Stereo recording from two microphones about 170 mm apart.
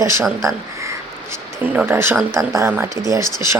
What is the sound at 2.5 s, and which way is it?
Speech, 15° right (ahead or behind).